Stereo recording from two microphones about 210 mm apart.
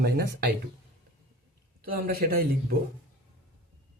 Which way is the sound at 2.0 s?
45° right (ahead or behind).